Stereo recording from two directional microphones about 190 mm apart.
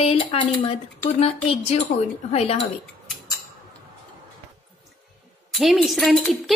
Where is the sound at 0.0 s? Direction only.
30° left (ahead or behind).